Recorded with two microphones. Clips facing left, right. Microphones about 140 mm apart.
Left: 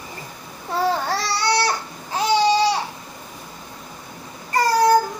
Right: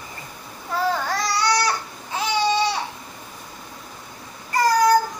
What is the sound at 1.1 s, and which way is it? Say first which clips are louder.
Baby cry: even; 30° left (ahead or behind).